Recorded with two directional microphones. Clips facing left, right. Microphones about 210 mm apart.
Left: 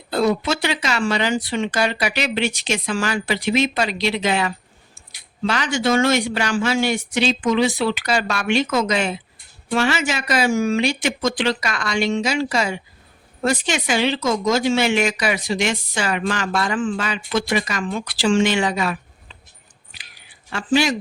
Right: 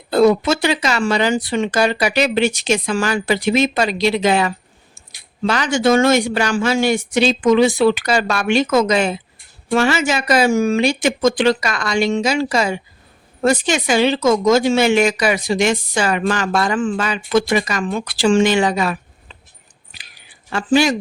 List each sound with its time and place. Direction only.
0.1 s speech: 45° right (ahead or behind)
14.2 s speech: 90° right
14.5 s speech: 45° right (ahead or behind)
20.5 s speech: 45° right (ahead or behind)